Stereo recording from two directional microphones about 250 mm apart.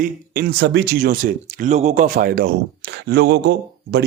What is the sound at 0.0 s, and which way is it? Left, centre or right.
Speech, right.